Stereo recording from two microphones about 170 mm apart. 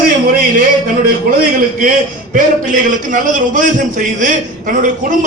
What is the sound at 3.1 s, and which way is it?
A man's voice, 50° right (ahead or behind).